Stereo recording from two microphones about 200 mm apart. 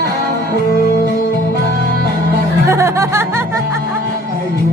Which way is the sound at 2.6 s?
15° right (ahead or behind).